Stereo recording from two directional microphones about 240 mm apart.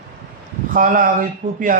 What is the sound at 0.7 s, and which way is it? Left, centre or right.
Speech, right.